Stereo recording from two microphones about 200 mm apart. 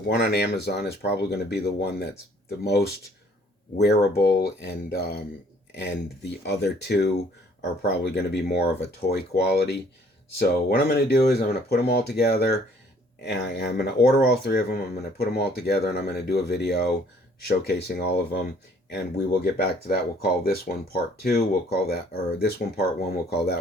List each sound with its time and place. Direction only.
0.1 s speech: 55° left (ahead or behind)